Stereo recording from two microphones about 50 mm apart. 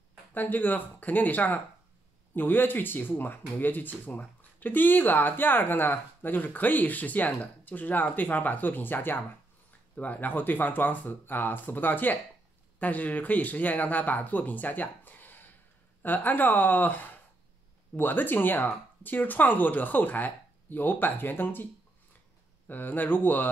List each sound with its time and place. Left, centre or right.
0.3 s speech: left
22.7 s speech: left